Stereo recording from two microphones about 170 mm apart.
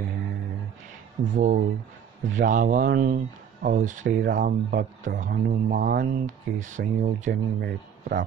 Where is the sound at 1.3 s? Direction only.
50° right (ahead or behind).